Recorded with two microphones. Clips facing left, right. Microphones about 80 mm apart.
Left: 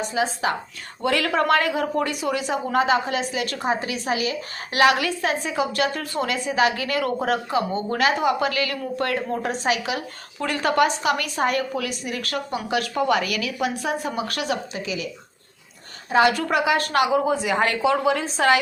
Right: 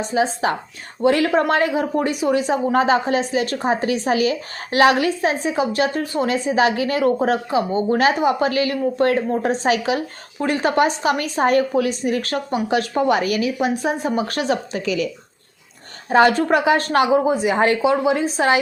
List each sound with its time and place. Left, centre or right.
0.0 s a woman's voice: right
10.4 s a woman's voice: right
14.7 s a woman's voice: right